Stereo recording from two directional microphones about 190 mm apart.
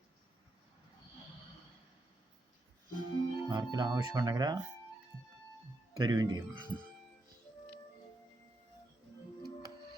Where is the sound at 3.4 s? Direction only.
20° right (ahead or behind).